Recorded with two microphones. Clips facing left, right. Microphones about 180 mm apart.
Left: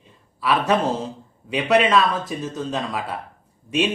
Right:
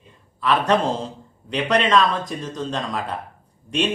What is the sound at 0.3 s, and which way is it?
A man's voice, 5° left (ahead or behind).